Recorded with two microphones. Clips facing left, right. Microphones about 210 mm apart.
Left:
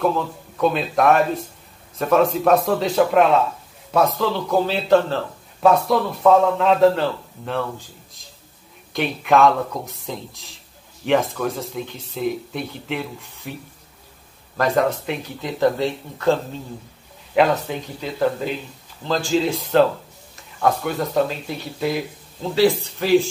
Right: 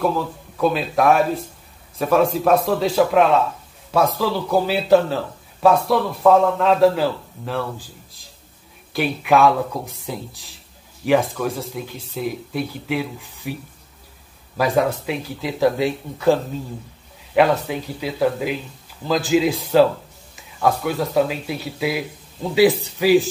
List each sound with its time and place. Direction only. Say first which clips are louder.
0.0 s a man's voice: even; 5° right (ahead or behind)
8.9 s a man's voice: even; 5° right (ahead or behind)
14.6 s a man's voice: even; centre (ahead or behind)